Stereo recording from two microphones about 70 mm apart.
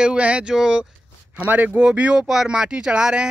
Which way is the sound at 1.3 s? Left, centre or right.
Right.